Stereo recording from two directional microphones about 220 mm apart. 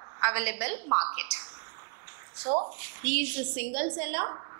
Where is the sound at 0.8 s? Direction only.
30° right (ahead or behind).